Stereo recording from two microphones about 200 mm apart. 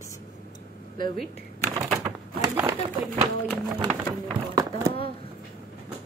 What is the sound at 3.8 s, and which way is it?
Speech, 20° right (ahead or behind).